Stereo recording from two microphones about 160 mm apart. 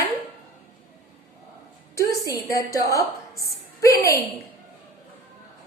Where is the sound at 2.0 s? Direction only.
20° left (ahead or behind).